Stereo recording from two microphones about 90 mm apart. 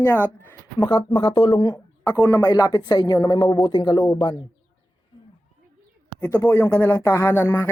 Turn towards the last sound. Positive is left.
turn(degrees=30)  # may be behind; listen again after turning